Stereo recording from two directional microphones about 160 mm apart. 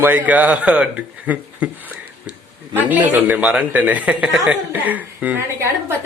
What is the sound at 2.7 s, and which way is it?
A man's voice, 10° right (ahead or behind).